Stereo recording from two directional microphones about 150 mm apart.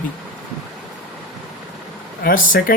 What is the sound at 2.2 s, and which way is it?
Speech, 70° left (ahead or behind).